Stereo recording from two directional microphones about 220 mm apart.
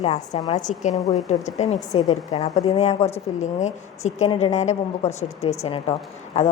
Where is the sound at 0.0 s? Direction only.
25° left (ahead or behind).